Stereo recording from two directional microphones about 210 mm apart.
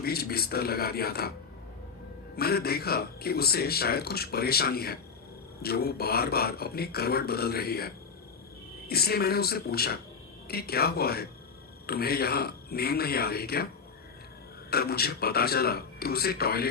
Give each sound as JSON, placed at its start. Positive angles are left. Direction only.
{"t": 0.0, "sound": "speech", "side_deg": 45}
{"t": 2.3, "sound": "speech", "side_deg": 50}
{"t": 14.7, "sound": "speech", "side_deg": 45}